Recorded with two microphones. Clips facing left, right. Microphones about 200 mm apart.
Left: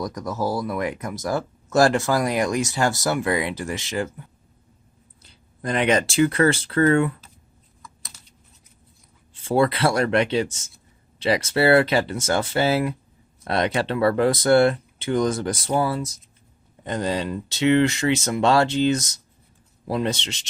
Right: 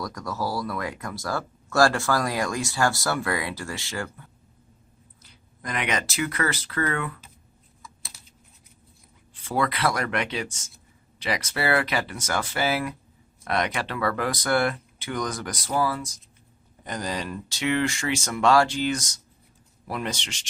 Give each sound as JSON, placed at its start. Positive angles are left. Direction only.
{"t": 0.0, "sound": "speech", "side_deg": 20}
{"t": 5.2, "sound": "speech", "side_deg": 30}
{"t": 7.8, "sound": "computer keyboard", "side_deg": -5}
{"t": 9.3, "sound": "speech", "side_deg": 25}